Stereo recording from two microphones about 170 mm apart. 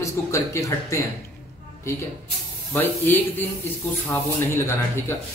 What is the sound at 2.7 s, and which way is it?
Speech, 10° left (ahead or behind).